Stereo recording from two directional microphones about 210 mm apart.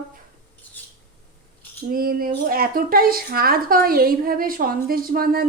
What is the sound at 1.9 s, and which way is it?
A woman's voice, 45° right (ahead or behind).